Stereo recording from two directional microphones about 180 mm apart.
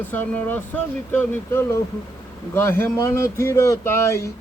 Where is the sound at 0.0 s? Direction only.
10° left (ahead or behind).